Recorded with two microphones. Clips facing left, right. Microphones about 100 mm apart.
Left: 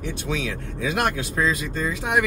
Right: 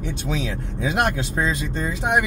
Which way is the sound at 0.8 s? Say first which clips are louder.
Right 2 dB; 20° right (ahead or behind).